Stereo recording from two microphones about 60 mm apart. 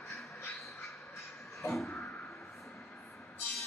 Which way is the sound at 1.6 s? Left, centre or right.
Centre.